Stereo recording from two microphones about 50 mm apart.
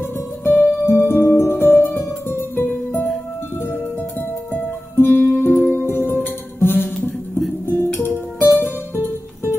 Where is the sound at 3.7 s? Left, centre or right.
Left.